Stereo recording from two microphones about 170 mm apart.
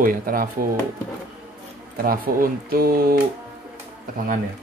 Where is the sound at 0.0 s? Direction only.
60° right (ahead or behind).